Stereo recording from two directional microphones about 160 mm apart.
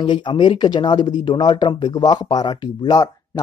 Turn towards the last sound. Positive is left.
turn(degrees=25)  # may be behind; listen again after turning